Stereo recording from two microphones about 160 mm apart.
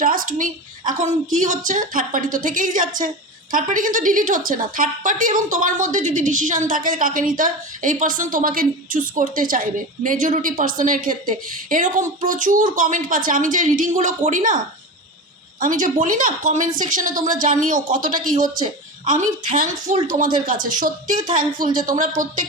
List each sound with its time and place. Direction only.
0.0 s a woman's voice: 60° right (ahead or behind)
15.6 s a woman's voice: 55° right (ahead or behind)